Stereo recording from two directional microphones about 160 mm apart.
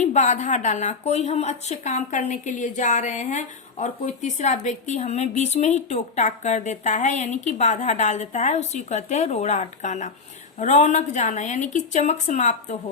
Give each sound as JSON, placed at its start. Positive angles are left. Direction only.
{"t": 0.0, "sound": "a woman's voice", "side_deg": 45}